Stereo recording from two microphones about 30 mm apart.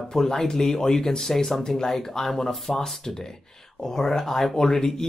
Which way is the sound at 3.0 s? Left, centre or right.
Left.